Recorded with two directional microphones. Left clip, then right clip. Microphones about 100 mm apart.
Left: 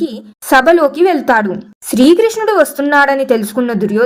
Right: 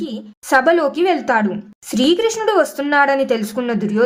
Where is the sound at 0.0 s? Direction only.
40° left (ahead or behind).